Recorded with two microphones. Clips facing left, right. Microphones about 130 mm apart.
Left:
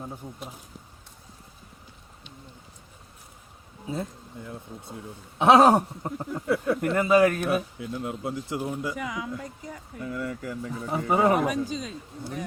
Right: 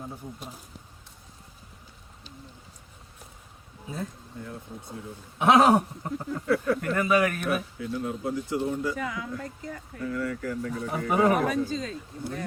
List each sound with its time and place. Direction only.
5.4 s a sound: 30° left (ahead or behind)
6.1 s speech: 25° left (ahead or behind)
7.4 s speech: 20° left (ahead or behind)
10.1 s speech: 20° left (ahead or behind)